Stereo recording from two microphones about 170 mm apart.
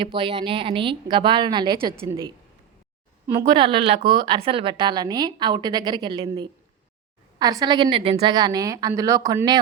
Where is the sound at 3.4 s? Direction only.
30° right (ahead or behind).